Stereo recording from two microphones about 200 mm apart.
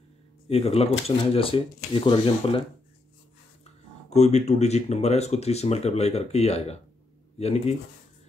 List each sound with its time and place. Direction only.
0.5 s speech: 30° left (ahead or behind)
4.1 s speech: 35° left (ahead or behind)